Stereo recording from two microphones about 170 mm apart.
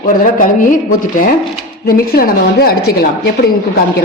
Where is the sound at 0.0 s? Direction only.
50° left (ahead or behind).